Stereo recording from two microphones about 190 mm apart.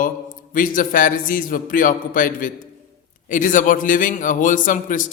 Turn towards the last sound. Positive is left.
turn(degrees=45)  # may be behind; listen again after turning